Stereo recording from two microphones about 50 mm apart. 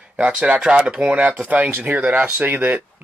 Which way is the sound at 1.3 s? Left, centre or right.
Right.